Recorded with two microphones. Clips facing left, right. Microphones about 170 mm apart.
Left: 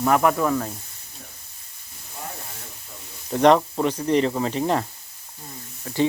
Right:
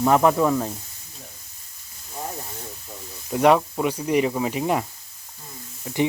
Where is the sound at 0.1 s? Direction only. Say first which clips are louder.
Right 1 dB; 20° right (ahead or behind).